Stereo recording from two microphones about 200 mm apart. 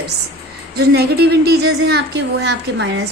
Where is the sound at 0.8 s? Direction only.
55° right (ahead or behind).